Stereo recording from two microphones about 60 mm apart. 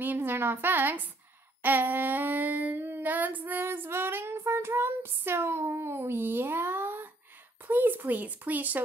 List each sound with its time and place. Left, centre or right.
0.0 s a woman's voice: right
1.6 s a sound: right
7.6 s speech: right